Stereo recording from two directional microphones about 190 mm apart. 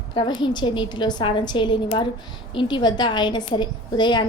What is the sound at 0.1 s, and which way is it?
A woman's voice, 25° left (ahead or behind).